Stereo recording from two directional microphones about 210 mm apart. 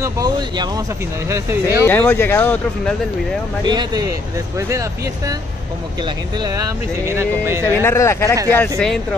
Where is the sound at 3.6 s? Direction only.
20° right (ahead or behind).